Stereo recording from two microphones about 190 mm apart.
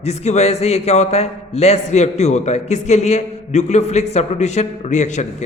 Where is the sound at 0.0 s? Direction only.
35° left (ahead or behind).